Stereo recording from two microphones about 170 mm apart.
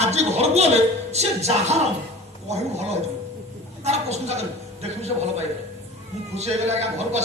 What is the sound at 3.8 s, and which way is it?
Speech, 40° right (ahead or behind).